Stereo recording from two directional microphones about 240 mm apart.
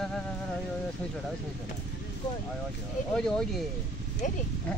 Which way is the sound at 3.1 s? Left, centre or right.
Centre.